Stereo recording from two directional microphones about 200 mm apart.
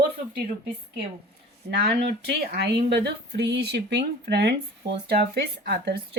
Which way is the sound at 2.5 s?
55° right (ahead or behind).